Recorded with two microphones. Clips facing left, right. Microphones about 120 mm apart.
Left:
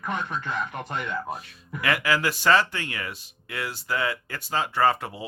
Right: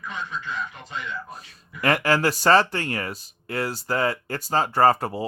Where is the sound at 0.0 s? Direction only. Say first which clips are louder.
Left 3 dB; 55° left (ahead or behind).